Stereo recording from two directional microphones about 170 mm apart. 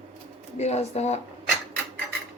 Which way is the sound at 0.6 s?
40° left (ahead or behind).